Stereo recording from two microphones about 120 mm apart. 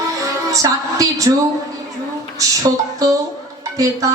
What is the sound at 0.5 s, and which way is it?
Speech, 30° right (ahead or behind).